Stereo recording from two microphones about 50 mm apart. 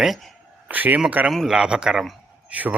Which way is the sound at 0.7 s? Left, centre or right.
Right.